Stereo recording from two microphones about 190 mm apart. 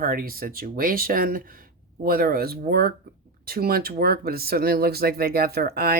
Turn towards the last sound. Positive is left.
turn(degrees=-55)  # may be behind; listen again after turning